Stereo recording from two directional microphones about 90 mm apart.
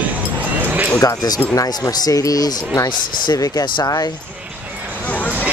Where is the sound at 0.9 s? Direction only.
45° left (ahead or behind).